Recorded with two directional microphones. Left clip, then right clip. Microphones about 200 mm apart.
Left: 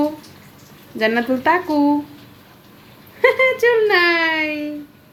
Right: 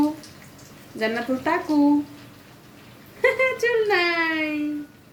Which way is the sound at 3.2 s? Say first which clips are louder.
Left 6 dB; 20° left (ahead or behind).